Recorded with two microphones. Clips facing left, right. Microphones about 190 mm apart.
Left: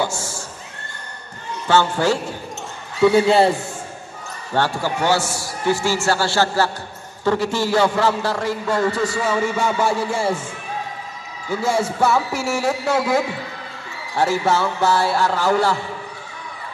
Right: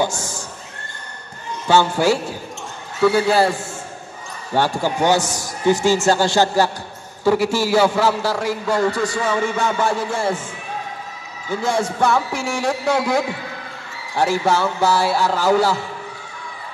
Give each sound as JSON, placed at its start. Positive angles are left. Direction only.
{"t": 0.0, "sound": "neigh", "side_deg": -15}
{"t": 1.7, "sound": "a man's voice", "side_deg": -10}
{"t": 3.0, "sound": "a man's voice", "side_deg": 25}
{"t": 4.6, "sound": "a man's voice", "side_deg": -15}
{"t": 11.6, "sound": "a man's voice", "side_deg": 5}